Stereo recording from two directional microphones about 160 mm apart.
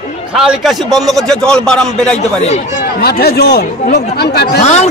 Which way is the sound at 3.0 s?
85° left.